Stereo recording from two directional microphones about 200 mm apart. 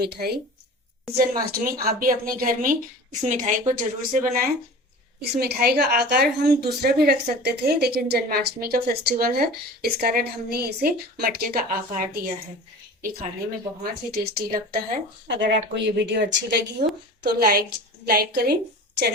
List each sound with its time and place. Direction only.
0.0 s a woman's voice: 50° right (ahead or behind)
5.2 s a woman's voice: 55° right (ahead or behind)
15.3 s a woman's voice: 60° right (ahead or behind)
16.8 s a woman's voice: 35° right (ahead or behind)
17.2 s a woman's voice: 50° right (ahead or behind)